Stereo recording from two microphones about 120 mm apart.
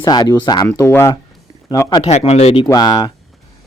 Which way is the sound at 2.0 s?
60° left (ahead or behind).